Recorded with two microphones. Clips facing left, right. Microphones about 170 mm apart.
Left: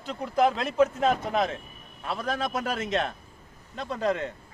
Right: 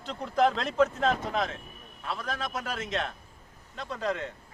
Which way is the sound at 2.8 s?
55° left (ahead or behind).